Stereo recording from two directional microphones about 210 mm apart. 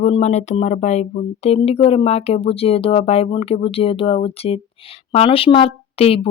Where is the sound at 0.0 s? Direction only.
30° left (ahead or behind).